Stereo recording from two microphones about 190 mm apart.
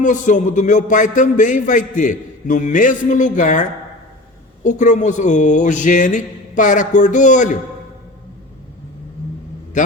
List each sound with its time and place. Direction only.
0.0 s a man's voice: 40° left (ahead or behind)
9.7 s a man's voice: 40° left (ahead or behind)